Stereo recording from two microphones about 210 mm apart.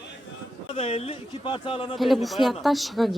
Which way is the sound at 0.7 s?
30° left (ahead or behind).